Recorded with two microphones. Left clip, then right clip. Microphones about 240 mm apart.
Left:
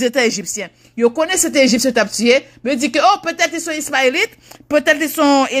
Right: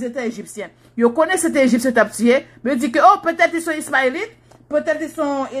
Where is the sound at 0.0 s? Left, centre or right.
Left.